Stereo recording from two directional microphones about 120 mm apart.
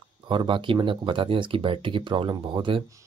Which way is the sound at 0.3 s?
40° right (ahead or behind).